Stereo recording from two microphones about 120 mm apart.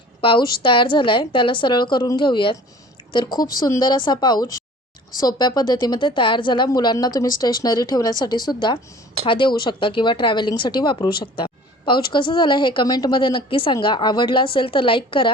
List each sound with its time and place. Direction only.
0.2 s a woman's voice: 45° left (ahead or behind)